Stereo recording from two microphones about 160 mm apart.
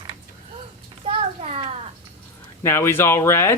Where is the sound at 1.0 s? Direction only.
35° right (ahead or behind).